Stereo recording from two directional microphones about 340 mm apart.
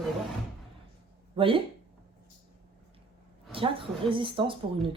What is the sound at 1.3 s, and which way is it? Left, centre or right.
Speech, centre.